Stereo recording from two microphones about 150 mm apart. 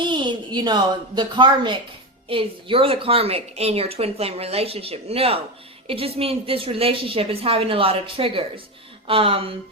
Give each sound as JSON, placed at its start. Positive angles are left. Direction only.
{"t": 0.0, "sound": "a woman's voice", "side_deg": -30}